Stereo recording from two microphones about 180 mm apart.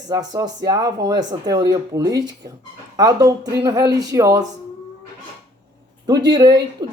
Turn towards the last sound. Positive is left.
turn(degrees=-20)  # may be behind; listen again after turning